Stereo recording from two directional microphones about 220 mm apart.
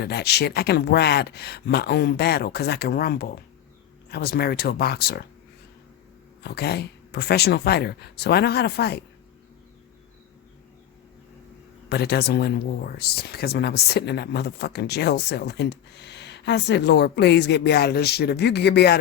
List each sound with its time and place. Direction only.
0.0 s speech: 45° left (ahead or behind)
6.4 s speech: 45° left (ahead or behind)
11.9 s speech: 45° left (ahead or behind)